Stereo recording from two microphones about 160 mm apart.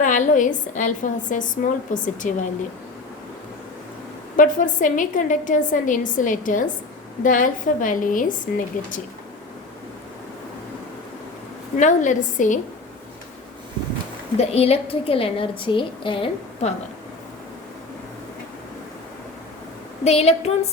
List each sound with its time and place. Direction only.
0.0 s a woman's voice: 55° left (ahead or behind)
4.4 s a woman's voice: 55° left (ahead or behind)
11.8 s a woman's voice: 50° left (ahead or behind)
14.3 s a woman's voice: 40° left (ahead or behind)
20.1 s a woman's voice: 40° left (ahead or behind)